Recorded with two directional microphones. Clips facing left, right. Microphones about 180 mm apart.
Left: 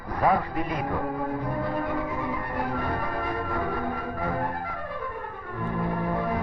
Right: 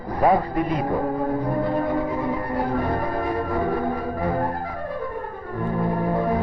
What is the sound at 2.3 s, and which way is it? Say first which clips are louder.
Music: right 6 dB; 35° right (ahead or behind).